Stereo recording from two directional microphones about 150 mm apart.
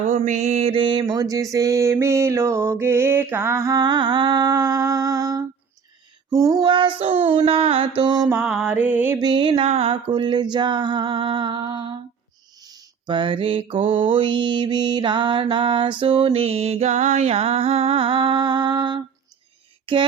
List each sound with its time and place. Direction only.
0.1 s mantra: 50° right (ahead or behind); by 8.3 s 30° right (ahead or behind)
8.4 s music: centre (ahead or behind)
9.1 s mantra: 30° right (ahead or behind)
19.8 s a sound: 35° right (ahead or behind)